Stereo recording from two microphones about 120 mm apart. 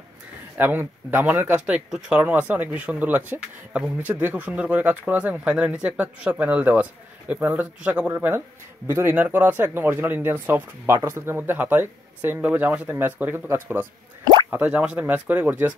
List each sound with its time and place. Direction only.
0.6 s speech: 15° right (ahead or behind)